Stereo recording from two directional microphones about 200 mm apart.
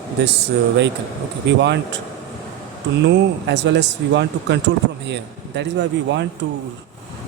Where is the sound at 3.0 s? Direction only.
60° right (ahead or behind).